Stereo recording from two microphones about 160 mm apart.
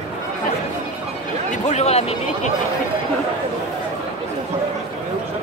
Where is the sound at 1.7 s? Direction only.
45° left (ahead or behind).